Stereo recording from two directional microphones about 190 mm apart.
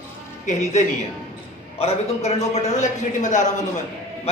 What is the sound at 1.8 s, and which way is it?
A man's voice, 35° left (ahead or behind).